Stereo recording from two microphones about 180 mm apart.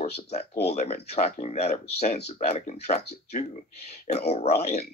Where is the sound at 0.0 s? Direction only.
35° left (ahead or behind).